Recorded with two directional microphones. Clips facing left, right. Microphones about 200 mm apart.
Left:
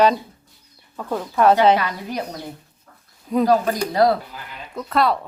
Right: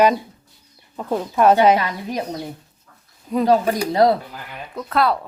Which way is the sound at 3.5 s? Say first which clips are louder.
Right 1 dB; 25° right (ahead or behind).